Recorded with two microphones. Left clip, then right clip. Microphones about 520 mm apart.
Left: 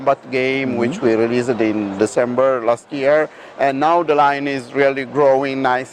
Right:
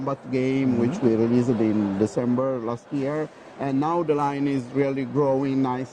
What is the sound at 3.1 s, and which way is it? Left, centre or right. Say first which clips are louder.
Speech: left 14 dB; centre.